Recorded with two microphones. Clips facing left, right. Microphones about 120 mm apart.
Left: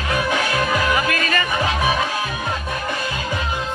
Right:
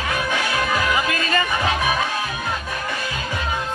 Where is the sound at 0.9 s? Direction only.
25° right (ahead or behind).